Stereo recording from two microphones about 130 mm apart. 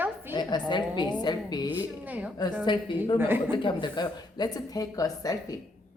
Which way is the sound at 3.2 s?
15° right (ahead or behind).